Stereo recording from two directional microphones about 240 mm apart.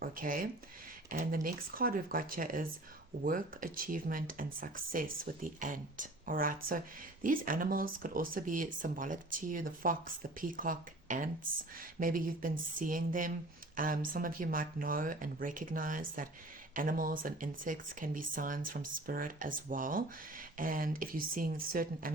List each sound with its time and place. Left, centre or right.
0.0 s speech: right